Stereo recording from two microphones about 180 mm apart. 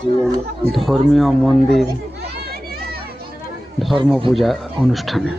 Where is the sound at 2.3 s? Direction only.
60° right (ahead or behind).